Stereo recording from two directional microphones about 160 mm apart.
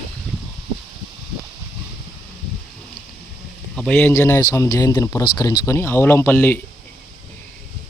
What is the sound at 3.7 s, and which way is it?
Speech, 5° left (ahead or behind).